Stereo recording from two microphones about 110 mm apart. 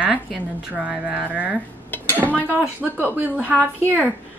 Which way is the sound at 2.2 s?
15° left (ahead or behind).